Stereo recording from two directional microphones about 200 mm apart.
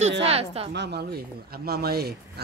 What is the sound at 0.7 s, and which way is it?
Speech, 60° right (ahead or behind).